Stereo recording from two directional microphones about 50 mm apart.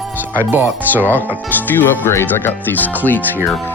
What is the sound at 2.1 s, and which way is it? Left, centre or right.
Speech, left.